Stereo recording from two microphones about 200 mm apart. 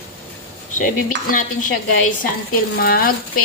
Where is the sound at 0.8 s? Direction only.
40° left (ahead or behind).